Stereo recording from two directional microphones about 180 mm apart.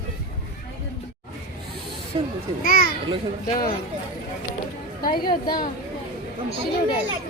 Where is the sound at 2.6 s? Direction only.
55° left (ahead or behind).